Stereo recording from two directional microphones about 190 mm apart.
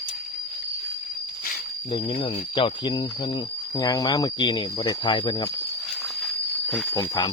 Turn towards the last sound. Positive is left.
turn(degrees=20)  # may be behind; listen again after turning